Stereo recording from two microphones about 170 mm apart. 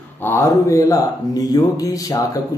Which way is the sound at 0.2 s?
15° left (ahead or behind).